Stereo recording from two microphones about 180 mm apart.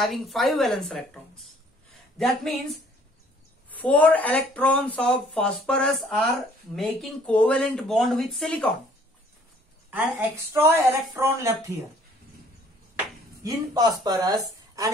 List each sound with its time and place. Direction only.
0.0 s speech: centre (ahead or behind)
3.8 s speech: 10° left (ahead or behind)
9.8 s a woman's voice: 10° right (ahead or behind)
13.4 s speech: 20° right (ahead or behind)